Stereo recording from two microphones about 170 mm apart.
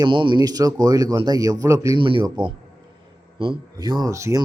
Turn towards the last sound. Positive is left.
turn(degrees=-20)  # may be behind; listen again after turning